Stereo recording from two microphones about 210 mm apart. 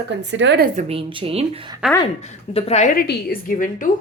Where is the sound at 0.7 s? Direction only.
30° right (ahead or behind).